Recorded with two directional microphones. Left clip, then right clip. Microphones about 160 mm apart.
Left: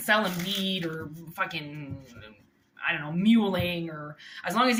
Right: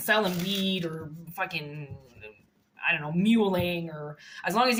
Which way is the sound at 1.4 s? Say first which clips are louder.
Left 1 dB; 40° right (ahead or behind).